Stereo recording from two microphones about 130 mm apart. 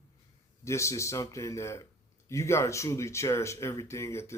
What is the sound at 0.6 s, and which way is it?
Speech, 20° left (ahead or behind).